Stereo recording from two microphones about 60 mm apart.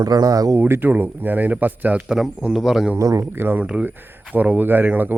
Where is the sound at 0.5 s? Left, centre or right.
Right.